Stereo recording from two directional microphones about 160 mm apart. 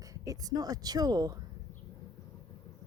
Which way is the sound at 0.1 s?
20° right (ahead or behind).